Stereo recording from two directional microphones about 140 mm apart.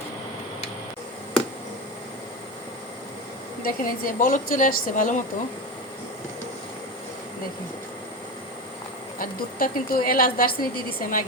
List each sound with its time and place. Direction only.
3.6 s a woman's voice: 85° left
9.1 s a woman's voice: 90° left